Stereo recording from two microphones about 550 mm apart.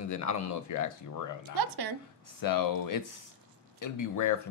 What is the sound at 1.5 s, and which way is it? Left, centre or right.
Speech, right.